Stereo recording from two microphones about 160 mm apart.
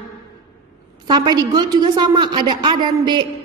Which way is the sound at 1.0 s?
25° right (ahead or behind).